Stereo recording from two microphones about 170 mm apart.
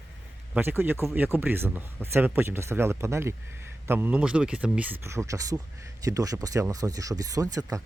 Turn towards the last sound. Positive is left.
turn(degrees=-20)  # may be behind; listen again after turning